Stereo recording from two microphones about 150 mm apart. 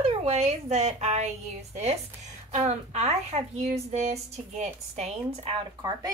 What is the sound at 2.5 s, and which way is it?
A woman's voice, 45° right (ahead or behind).